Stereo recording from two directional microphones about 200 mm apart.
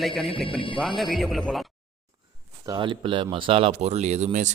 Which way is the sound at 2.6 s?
20° right (ahead or behind).